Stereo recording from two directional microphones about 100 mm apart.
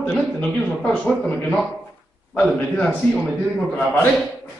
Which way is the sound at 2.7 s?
5° left (ahead or behind).